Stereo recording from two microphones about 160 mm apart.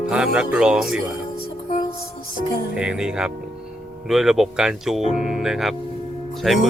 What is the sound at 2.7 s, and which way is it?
Speech, 5° right (ahead or behind).